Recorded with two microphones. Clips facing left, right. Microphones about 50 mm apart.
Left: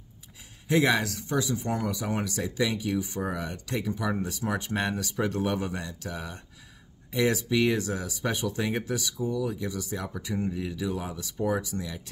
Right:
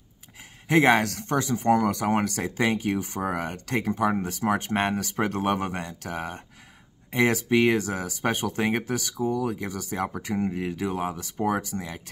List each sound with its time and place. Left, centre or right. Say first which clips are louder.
0.7 s speech: right 4 dB; right
1.8 s speech: right 6 dB; right